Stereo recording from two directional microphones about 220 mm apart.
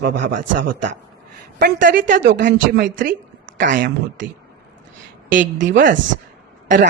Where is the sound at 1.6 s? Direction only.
45° right (ahead or behind).